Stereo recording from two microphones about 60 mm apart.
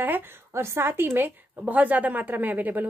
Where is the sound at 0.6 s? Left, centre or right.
Right.